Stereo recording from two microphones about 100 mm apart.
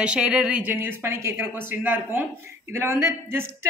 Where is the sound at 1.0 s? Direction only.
25° right (ahead or behind).